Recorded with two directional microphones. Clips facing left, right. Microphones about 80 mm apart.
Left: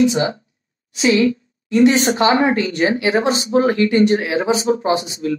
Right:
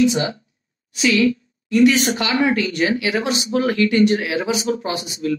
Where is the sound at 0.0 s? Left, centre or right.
Left.